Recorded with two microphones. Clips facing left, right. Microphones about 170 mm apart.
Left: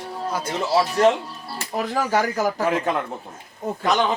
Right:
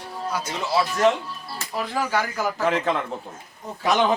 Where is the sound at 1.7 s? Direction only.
40° left (ahead or behind).